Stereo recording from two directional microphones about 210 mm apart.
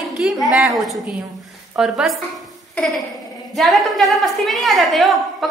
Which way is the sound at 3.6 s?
Centre (ahead or behind).